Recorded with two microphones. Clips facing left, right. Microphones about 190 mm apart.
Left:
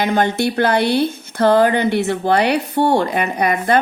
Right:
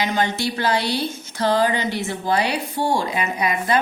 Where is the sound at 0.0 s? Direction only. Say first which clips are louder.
Left 5 dB; 55° left (ahead or behind).